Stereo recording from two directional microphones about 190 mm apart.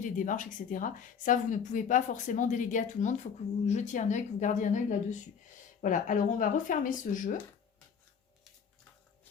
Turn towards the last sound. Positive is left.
turn(degrees=45)  # may be behind; listen again after turning